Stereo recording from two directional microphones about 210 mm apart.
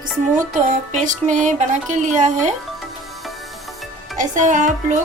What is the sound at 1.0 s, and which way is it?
Speech, 35° right (ahead or behind).